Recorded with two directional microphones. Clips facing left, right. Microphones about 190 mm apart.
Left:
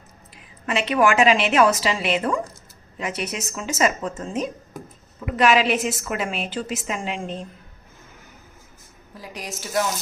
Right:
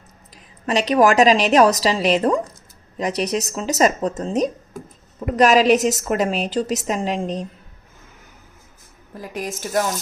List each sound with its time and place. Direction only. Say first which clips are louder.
0.6 s a woman's voice: right 4 dB; 35° right (ahead or behind)
9.1 s a woman's voice: right 6 dB; 50° right (ahead or behind)